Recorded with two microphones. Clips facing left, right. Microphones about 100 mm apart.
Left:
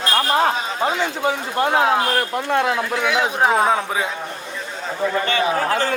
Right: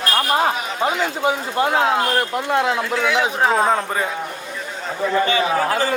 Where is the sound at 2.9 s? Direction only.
15° left (ahead or behind).